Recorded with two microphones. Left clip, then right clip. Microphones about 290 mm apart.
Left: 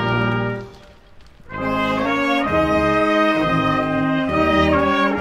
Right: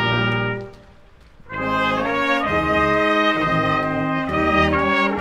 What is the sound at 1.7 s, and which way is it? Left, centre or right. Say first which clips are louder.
Brass instrument: even; centre.